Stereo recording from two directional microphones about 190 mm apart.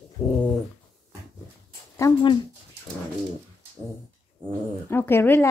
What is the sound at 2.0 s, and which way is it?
Speech, 15° left (ahead or behind).